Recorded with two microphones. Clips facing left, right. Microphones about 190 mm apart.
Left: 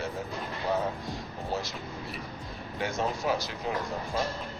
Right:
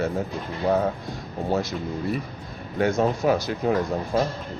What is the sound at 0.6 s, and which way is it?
Speech, 70° right (ahead or behind).